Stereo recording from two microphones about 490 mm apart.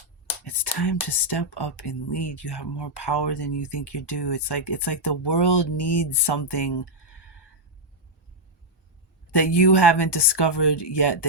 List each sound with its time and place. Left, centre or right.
0.4 s speech: left
9.3 s speech: left